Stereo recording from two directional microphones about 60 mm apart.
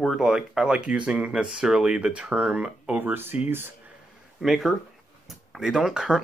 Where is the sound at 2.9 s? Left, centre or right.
Right.